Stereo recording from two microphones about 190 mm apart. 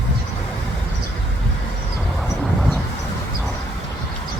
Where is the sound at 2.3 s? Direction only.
Centre (ahead or behind).